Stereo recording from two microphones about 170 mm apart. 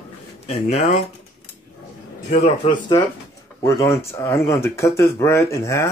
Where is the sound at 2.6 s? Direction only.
35° left (ahead or behind).